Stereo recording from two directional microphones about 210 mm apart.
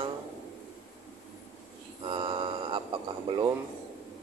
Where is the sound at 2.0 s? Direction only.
25° right (ahead or behind).